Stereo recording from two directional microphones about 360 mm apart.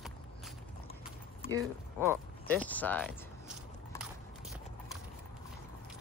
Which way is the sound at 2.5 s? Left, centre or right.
Centre.